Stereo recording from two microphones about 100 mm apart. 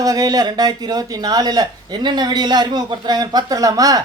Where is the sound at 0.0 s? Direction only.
40° right (ahead or behind).